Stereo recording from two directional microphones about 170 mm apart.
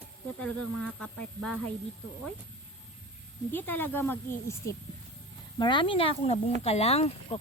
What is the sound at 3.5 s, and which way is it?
Speech, 10° left (ahead or behind).